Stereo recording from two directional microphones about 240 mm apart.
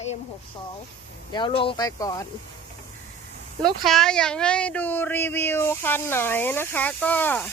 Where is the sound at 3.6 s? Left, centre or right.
Centre.